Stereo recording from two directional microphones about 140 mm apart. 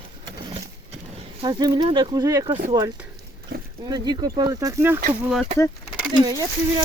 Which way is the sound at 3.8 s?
30° right (ahead or behind).